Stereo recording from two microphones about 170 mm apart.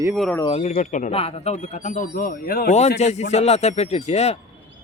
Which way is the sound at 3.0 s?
40° left (ahead or behind).